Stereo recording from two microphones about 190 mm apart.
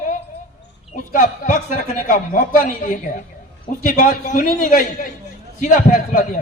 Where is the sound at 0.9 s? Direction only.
45° left (ahead or behind).